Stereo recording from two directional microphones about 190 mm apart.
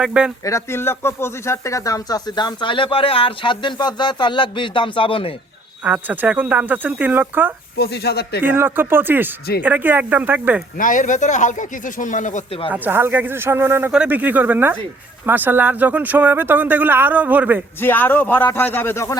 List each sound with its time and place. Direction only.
0.0 s speech: 5° right (ahead or behind)
0.4 s speech: 15° left (ahead or behind)
5.8 s speech: 10° right (ahead or behind)
7.8 s speech: 60° left (ahead or behind)
8.4 s speech: 10° right (ahead or behind)
10.8 s speech: 45° left (ahead or behind)
12.7 s speech: 10° right (ahead or behind)
17.7 s a man's voice: 10° left (ahead or behind)